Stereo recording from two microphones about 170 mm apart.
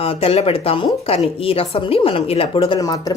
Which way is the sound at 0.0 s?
35° left (ahead or behind).